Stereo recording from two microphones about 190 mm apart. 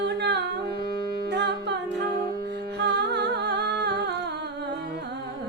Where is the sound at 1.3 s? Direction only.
60° right (ahead or behind).